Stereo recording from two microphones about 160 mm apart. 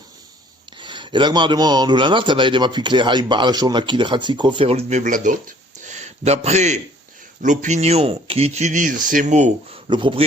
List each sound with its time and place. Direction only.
0.8 s a man's voice: 30° right (ahead or behind); by 9.5 s 50° right (ahead or behind)
9.9 s speech: 30° right (ahead or behind)